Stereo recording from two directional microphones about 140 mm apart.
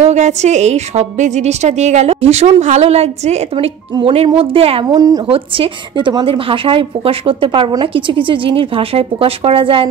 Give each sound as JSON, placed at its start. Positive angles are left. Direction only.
{"t": 0.1, "sound": "a woman's voice", "side_deg": -55}
{"t": 4.8, "sound": "a woman's voice", "side_deg": -25}
{"t": 5.3, "sound": "a woman's voice", "side_deg": -40}